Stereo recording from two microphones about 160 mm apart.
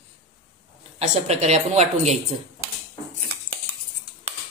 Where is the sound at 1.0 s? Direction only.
45° right (ahead or behind).